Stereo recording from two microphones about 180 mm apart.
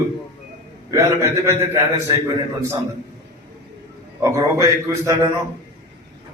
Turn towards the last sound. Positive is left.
turn(degrees=-15)  # may be behind; listen again after turning